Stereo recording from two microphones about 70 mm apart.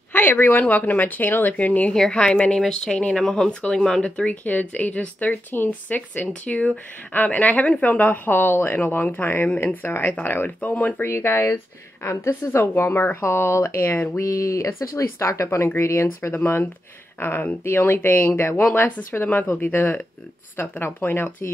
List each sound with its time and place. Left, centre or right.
0.1 s speech: left
14.2 s speech: left
17.2 s speech: left